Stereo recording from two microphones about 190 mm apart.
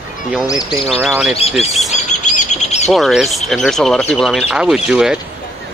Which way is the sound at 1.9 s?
40° left (ahead or behind).